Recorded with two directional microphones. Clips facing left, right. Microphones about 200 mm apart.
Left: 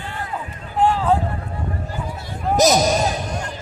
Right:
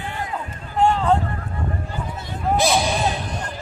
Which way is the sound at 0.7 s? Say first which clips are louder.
Even; 5° left (ahead or behind).